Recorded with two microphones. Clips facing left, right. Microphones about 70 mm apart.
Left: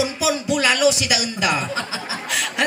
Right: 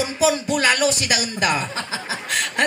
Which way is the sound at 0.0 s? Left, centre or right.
Right.